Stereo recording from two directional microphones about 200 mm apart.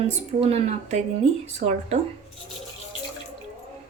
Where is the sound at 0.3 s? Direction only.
30° right (ahead or behind).